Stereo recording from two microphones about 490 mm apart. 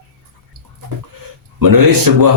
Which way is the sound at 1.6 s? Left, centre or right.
Right.